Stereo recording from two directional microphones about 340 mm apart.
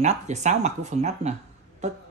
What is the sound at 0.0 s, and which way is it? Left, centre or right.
Speech, centre.